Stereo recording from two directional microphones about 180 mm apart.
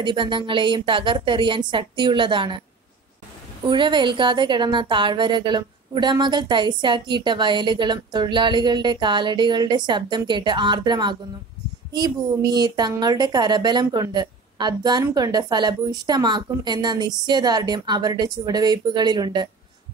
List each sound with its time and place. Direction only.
0.0 s speech: 25° right (ahead or behind)
3.6 s speech: 25° right (ahead or behind)